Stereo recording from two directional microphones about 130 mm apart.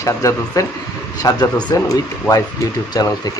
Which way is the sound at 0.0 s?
25° left (ahead or behind).